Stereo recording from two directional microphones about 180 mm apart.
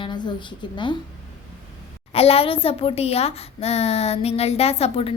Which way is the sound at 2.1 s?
35° left (ahead or behind).